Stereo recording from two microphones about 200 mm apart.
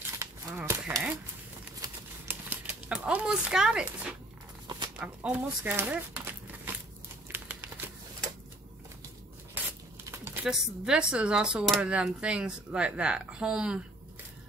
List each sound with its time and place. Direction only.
0.2 s livestock: 15° right (ahead or behind)
1.8 s typewriter: 10° right (ahead or behind)
4.6 s a sound: 20° right (ahead or behind)
5.0 s speech: 5° right (ahead or behind)
7.3 s a sound: 10° right (ahead or behind)
10.4 s speech: 5° right (ahead or behind)